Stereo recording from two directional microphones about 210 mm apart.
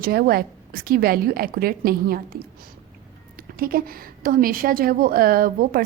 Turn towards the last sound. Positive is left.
turn(degrees=-45)  # may be behind; listen again after turning